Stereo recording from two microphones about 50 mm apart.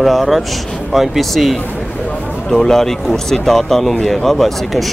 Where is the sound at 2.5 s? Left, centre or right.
Centre.